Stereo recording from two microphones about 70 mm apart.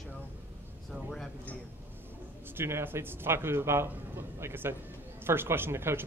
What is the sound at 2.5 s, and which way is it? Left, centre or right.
Speech, right.